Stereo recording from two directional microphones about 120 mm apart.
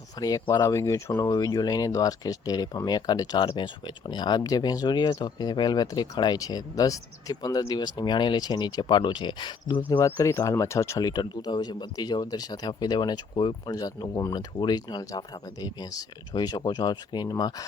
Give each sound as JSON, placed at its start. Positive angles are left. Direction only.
{"t": 0.2, "sound": "speech", "side_deg": 30}
{"t": 10.2, "sound": "speech", "side_deg": 20}